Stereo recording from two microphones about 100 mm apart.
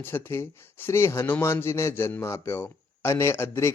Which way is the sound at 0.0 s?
25° left (ahead or behind).